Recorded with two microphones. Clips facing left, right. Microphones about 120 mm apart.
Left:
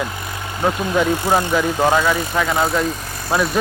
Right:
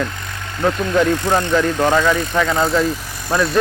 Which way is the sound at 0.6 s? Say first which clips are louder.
Right 2 dB; 15° left (ahead or behind).